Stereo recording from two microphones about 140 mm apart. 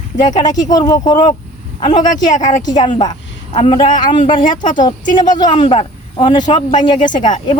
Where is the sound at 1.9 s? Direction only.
65° left (ahead or behind).